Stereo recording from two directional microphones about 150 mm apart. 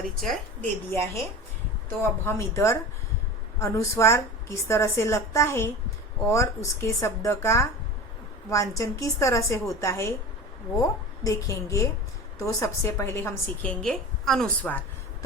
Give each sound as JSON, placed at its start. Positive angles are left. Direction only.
{"t": 0.2, "sound": "a woman's voice", "side_deg": 0}
{"t": 0.9, "sound": "a woman's voice", "side_deg": 15}